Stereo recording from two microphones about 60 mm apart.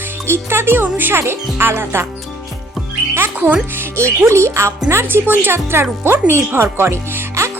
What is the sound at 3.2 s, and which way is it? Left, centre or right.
Speech, right.